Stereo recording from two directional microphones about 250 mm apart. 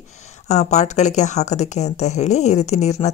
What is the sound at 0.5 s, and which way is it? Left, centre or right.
Speech, left.